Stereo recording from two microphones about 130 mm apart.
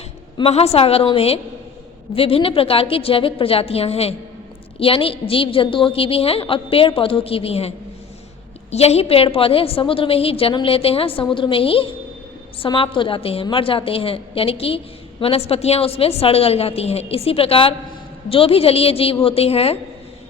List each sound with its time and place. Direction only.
0.3 s a woman's voice: 50° left (ahead or behind)
8.7 s a woman's voice: 55° left (ahead or behind)